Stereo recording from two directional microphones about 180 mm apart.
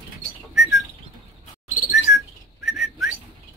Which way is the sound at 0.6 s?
Centre (ahead or behind).